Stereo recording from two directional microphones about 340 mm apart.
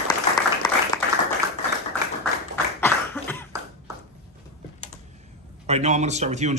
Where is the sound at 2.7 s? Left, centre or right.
Centre.